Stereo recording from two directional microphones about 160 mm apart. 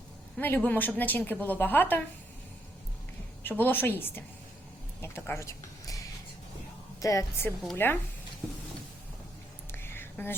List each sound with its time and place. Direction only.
0.3 s a woman's voice: 10° left (ahead or behind)
3.4 s a woman's voice: 10° left (ahead or behind)
7.0 s a woman's voice: 20° left (ahead or behind)
9.7 s a sound: 15° left (ahead or behind)